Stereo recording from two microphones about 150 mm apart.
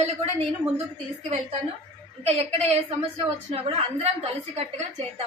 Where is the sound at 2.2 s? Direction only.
45° right (ahead or behind).